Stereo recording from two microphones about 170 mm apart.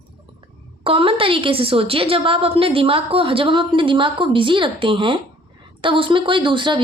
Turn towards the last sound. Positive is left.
turn(degrees=-30)  # may be behind; listen again after turning